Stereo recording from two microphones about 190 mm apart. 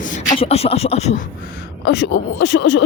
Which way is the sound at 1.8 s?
60° left (ahead or behind).